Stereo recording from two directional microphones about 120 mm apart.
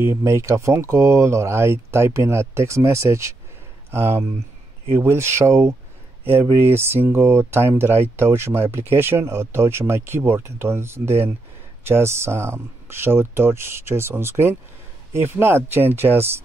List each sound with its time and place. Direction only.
0.0 s speech: 25° right (ahead or behind)